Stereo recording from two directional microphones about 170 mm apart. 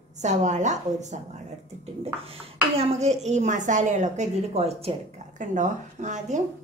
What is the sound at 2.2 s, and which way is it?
A woman's voice, 35° right (ahead or behind).